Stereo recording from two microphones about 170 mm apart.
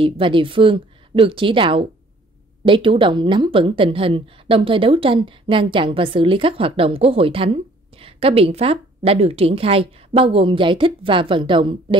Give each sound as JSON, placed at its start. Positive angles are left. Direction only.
{"t": 0.0, "sound": "a woman's voice", "side_deg": -30}